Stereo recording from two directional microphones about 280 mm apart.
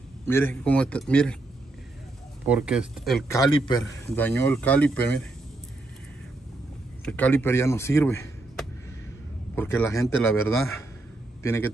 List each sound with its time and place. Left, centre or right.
0.3 s speech: centre
2.4 s speech: centre
3.3 s speech: centre
7.1 s speech: centre